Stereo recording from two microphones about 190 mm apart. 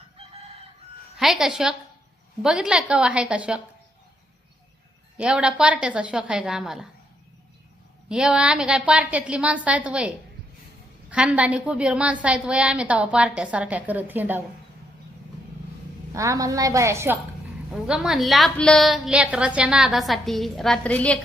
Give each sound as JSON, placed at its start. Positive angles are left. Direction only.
{"t": 1.1, "sound": "a woman's voice", "side_deg": 0}
{"t": 5.1, "sound": "a woman's voice", "side_deg": -5}
{"t": 8.1, "sound": "a woman's voice", "side_deg": -5}
{"t": 11.1, "sound": "a woman's voice", "side_deg": -5}
{"t": 16.1, "sound": "a woman's voice", "side_deg": -15}
{"t": 17.8, "sound": "a woman's voice", "side_deg": -5}